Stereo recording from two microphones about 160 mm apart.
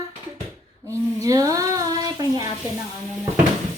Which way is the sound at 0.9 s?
20° right (ahead or behind).